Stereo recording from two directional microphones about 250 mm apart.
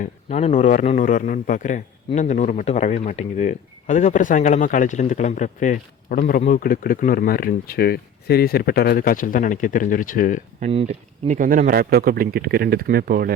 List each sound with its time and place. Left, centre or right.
0.0 s a man's voice: left
10.6 s speech: right